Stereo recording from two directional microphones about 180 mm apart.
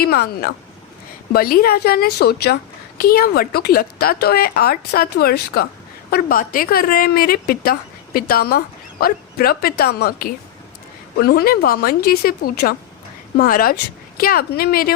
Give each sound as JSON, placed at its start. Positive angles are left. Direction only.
{"t": 0.0, "sound": "a woman's voice", "side_deg": 60}